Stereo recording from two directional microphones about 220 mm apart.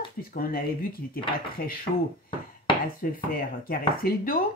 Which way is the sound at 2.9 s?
40° left (ahead or behind).